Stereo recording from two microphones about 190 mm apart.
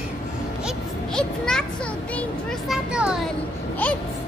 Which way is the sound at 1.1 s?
5° left (ahead or behind).